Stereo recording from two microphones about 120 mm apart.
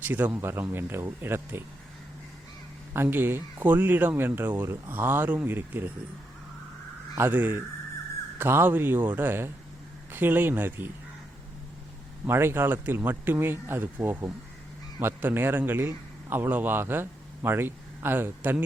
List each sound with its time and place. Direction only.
0.0 s speech: 15° right (ahead or behind)
2.9 s speech: 20° right (ahead or behind)
7.2 s speech: 15° right (ahead or behind)
12.2 s a man's voice: 20° right (ahead or behind)